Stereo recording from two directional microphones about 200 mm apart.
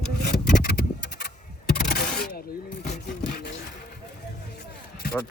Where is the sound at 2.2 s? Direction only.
50° left (ahead or behind).